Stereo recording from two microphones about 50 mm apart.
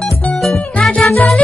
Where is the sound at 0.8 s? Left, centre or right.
Left.